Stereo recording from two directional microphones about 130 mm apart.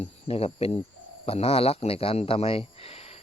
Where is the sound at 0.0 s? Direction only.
50° left (ahead or behind).